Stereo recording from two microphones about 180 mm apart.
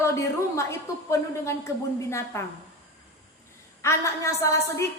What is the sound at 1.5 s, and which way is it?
Speech, 15° left (ahead or behind).